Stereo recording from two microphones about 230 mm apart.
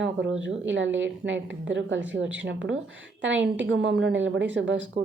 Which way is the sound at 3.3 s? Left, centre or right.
Centre.